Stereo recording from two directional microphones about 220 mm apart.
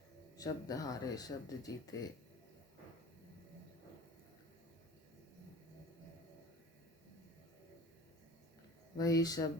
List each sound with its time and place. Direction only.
0.3 s speech: 15° left (ahead or behind)
9.0 s speech: 15° left (ahead or behind)